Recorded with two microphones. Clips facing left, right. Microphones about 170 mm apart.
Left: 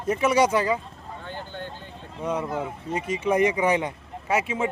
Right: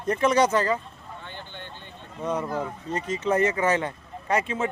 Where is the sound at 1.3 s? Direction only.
40° left (ahead or behind).